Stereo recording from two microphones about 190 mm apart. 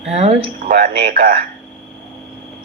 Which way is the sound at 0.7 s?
55° right (ahead or behind).